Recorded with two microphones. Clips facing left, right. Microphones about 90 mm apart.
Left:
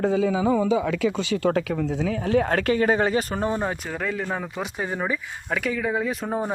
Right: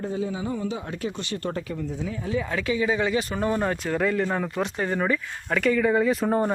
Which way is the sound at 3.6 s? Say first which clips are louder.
Right 3 dB; 10° left (ahead or behind).